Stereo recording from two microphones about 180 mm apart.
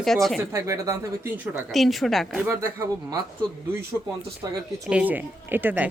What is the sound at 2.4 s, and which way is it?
Speech, 15° right (ahead or behind).